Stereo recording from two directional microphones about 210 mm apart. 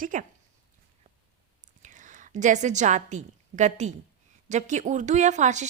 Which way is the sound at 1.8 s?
35° right (ahead or behind).